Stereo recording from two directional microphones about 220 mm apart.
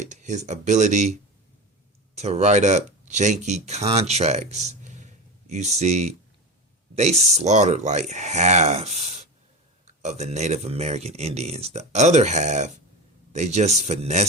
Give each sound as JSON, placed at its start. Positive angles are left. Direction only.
{"t": 0.0, "sound": "speech", "side_deg": -35}